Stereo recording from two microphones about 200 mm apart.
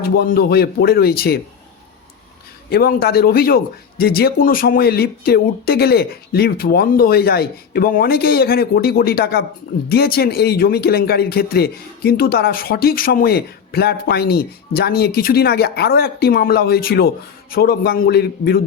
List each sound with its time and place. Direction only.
0.0 s speech: 50° left (ahead or behind)
2.6 s speech: 50° left (ahead or behind)